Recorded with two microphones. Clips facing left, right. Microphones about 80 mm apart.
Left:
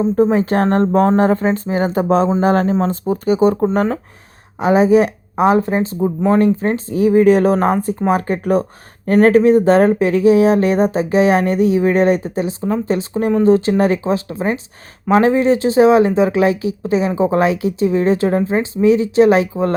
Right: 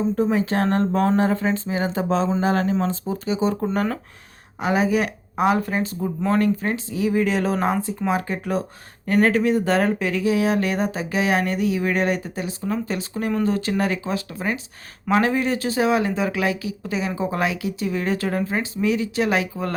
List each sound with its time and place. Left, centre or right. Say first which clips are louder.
0.0 s speech: left 7 dB; left
3.7 s speech: left 6 dB; left